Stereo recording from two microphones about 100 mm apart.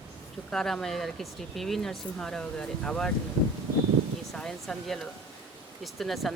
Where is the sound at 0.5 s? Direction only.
5° left (ahead or behind).